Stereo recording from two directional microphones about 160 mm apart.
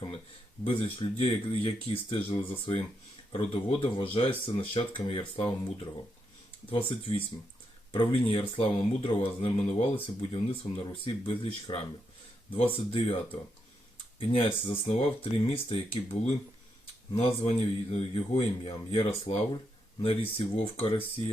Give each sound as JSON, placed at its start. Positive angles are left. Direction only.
{"t": 0.6, "sound": "speech", "side_deg": 35}
{"t": 6.7, "sound": "speech", "side_deg": 35}
{"t": 14.2, "sound": "speech", "side_deg": 35}